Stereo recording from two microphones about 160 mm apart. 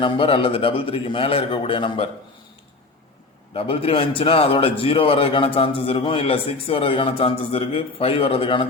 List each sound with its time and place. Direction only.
0.0 s a man's voice: 30° left (ahead or behind)
3.5 s a man's voice: 35° left (ahead or behind)